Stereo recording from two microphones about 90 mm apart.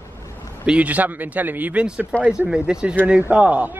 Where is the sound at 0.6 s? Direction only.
15° right (ahead or behind).